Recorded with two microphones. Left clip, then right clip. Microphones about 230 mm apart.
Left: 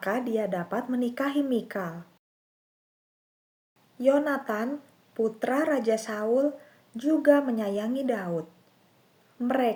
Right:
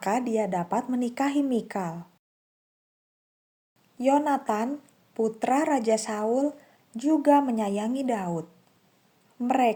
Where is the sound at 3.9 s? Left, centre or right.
Right.